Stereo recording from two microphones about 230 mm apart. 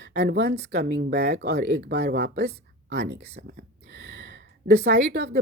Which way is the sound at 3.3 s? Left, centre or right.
Right.